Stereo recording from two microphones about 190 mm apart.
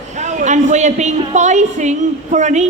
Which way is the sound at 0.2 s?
40° right (ahead or behind).